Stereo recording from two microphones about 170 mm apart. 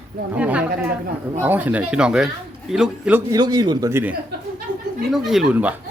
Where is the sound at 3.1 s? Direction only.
20° right (ahead or behind).